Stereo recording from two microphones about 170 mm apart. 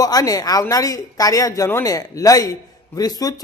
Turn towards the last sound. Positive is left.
turn(degrees=20)  # may be behind; listen again after turning